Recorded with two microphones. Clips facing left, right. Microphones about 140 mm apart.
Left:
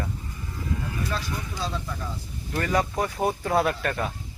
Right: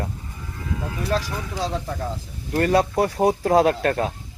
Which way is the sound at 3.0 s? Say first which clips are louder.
Right 6 dB; 35° right (ahead or behind).